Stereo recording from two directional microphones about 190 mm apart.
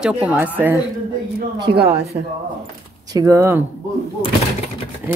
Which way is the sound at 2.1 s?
50° right (ahead or behind).